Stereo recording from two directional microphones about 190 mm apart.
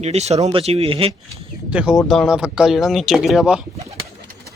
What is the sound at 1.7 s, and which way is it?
Speech, 5° right (ahead or behind).